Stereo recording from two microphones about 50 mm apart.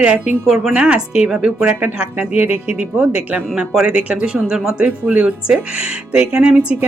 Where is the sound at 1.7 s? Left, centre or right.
Right.